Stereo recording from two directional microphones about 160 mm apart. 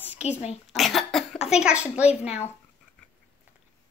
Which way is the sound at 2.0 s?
40° left (ahead or behind).